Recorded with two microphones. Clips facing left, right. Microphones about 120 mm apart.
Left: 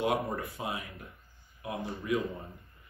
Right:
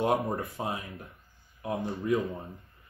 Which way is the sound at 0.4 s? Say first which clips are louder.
Right 3 dB; 40° right (ahead or behind).